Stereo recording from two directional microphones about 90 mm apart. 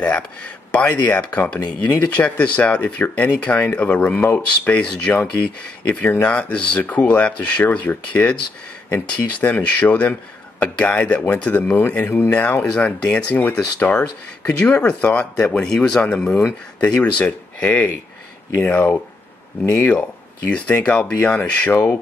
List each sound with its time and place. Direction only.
0.7 s speech: 15° left (ahead or behind)